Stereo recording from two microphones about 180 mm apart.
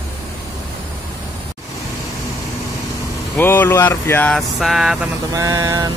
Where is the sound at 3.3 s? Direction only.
10° left (ahead or behind).